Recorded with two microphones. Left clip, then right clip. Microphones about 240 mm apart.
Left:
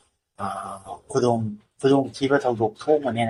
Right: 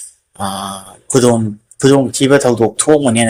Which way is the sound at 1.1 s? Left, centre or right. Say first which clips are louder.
Right 10 dB; right.